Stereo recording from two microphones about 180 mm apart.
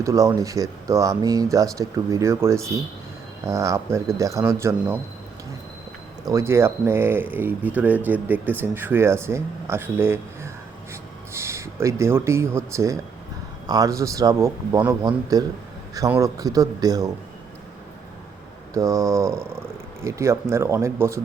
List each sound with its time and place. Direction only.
0.0 s speech: 15° right (ahead or behind)
6.2 s a man's voice: 15° right (ahead or behind)
18.7 s speech: 20° right (ahead or behind)